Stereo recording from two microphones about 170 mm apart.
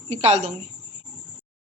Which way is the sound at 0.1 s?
40° right (ahead or behind).